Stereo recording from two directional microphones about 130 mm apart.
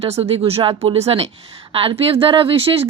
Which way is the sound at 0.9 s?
50° right (ahead or behind).